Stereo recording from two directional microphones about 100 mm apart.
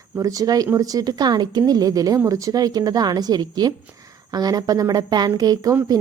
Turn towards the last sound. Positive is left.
turn(degrees=-40)  # may be behind; listen again after turning